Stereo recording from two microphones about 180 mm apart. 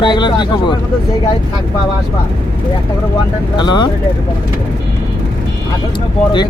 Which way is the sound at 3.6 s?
25° left (ahead or behind).